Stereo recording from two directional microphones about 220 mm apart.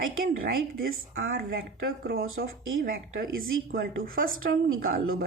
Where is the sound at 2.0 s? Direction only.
45° right (ahead or behind).